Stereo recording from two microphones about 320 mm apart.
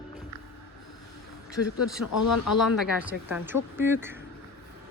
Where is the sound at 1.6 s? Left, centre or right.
Left.